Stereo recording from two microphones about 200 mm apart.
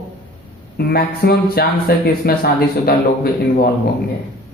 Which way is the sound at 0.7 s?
50° left (ahead or behind).